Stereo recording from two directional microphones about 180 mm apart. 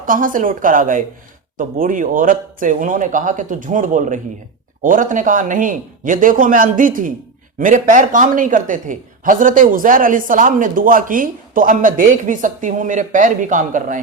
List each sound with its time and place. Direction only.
0.0 s speech: 50° right (ahead or behind)